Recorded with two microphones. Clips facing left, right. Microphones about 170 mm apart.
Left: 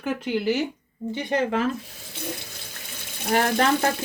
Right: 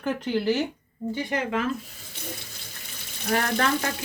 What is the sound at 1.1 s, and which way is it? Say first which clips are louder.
Speech: left 3 dB; 25° left (ahead or behind).